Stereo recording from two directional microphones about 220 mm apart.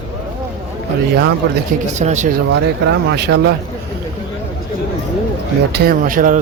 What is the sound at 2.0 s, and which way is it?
Speech, 30° right (ahead or behind).